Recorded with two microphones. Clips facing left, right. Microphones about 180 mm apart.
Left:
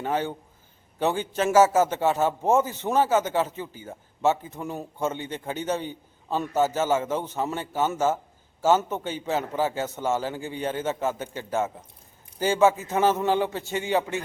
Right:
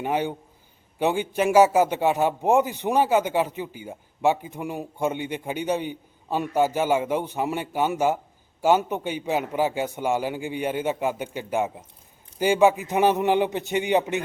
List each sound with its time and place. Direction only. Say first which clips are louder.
0.0 s a man's voice: right 2 dB; 15° right (ahead or behind)